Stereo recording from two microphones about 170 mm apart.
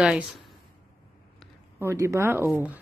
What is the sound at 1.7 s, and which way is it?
Speech, 15° right (ahead or behind).